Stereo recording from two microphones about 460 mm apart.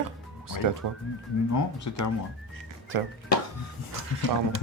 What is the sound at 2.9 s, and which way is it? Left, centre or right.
Speech, right.